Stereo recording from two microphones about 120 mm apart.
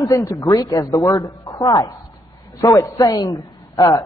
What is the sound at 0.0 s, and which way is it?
A man's voice, 30° left (ahead or behind).